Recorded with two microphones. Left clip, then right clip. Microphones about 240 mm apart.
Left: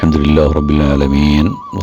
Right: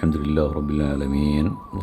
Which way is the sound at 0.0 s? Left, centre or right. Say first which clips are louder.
Left 11 dB; left.